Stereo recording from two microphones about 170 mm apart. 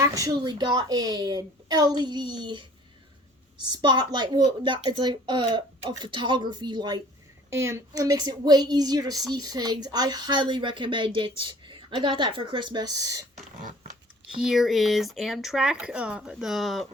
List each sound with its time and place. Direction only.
0.0 s a woman's voice: 20° right (ahead or behind)
14.4 s speech: centre (ahead or behind)